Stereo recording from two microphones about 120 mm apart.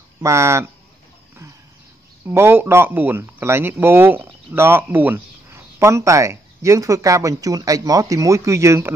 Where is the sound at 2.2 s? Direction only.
20° right (ahead or behind).